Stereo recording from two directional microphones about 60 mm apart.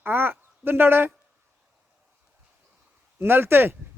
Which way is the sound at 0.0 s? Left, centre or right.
Right.